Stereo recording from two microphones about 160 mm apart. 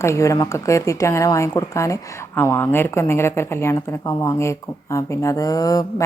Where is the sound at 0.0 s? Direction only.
20° left (ahead or behind).